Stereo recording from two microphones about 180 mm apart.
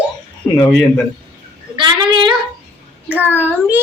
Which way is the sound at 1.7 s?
25° right (ahead or behind).